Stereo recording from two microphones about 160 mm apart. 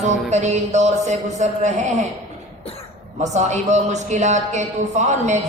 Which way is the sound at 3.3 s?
45° right (ahead or behind).